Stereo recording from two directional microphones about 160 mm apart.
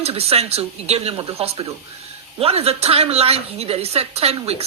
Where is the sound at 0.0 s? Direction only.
40° right (ahead or behind).